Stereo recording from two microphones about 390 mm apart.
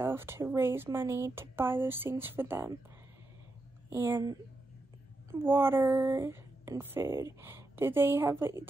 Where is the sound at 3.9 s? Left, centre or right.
Centre.